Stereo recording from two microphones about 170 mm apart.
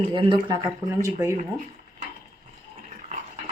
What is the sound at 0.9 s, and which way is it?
Speech, 15° right (ahead or behind).